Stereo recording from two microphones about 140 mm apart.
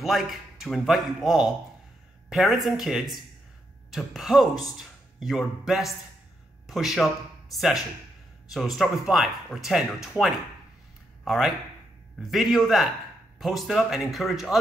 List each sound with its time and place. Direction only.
0.0 s a man's voice: centre (ahead or behind)